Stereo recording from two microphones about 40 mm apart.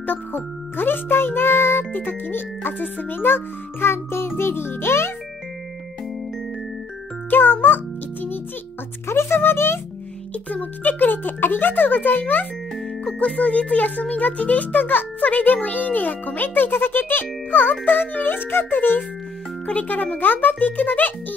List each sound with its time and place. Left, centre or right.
0.0 s a child's voice: left
1.9 s a child's voice: left
7.2 s music: left
9.1 s music: left
10.5 s a child's voice: left
13.0 s a child's voice: left
19.6 s a child's voice: left